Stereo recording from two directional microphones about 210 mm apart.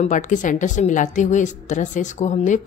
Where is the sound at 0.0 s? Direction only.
35° left (ahead or behind).